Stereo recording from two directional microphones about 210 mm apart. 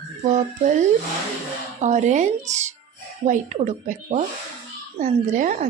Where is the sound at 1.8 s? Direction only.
35° right (ahead or behind).